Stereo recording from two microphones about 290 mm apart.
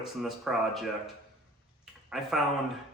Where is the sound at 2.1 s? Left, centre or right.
Centre.